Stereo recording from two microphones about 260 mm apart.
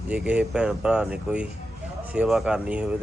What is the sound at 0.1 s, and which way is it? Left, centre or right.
Speech, centre.